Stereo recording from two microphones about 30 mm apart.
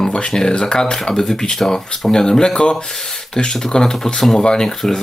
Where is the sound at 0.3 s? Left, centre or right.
Left.